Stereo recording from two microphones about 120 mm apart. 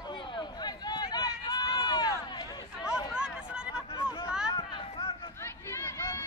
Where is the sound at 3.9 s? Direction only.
35° left (ahead or behind).